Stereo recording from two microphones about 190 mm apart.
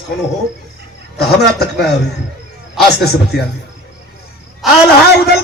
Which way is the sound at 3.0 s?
55° left (ahead or behind).